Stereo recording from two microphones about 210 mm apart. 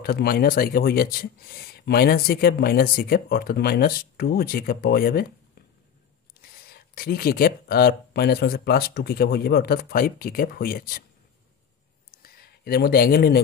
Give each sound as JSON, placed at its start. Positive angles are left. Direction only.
{"t": 0.0, "sound": "speech", "side_deg": 45}
{"t": 6.4, "sound": "speech", "side_deg": 45}
{"t": 12.1, "sound": "a sound", "side_deg": 45}